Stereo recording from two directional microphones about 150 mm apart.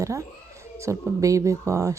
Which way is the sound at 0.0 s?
20° right (ahead or behind).